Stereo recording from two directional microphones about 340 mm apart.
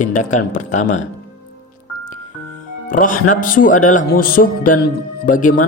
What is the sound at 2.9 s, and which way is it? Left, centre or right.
Speech, left.